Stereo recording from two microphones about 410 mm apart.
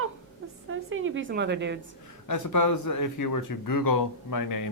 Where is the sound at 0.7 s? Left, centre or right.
Right.